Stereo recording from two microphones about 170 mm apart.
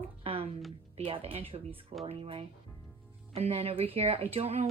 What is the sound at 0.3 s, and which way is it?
Music, 35° right (ahead or behind).